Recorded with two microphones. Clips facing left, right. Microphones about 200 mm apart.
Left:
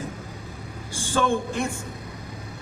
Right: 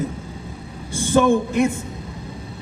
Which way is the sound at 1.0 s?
20° right (ahead or behind).